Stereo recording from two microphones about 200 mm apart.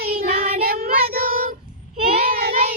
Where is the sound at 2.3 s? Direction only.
50° right (ahead or behind).